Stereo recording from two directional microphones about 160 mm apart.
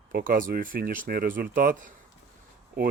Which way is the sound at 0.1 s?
65° right (ahead or behind).